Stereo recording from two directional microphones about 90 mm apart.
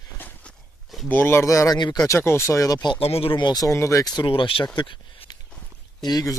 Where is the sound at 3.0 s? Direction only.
90° left.